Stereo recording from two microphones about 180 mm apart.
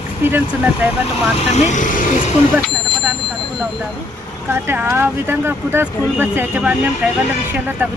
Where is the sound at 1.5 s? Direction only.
40° left (ahead or behind).